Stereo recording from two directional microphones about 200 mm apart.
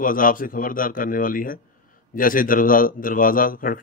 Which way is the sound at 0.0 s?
45° left (ahead or behind).